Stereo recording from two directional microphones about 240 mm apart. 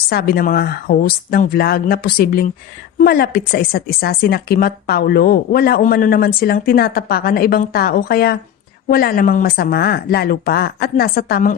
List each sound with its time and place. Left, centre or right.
0.1 s speech: left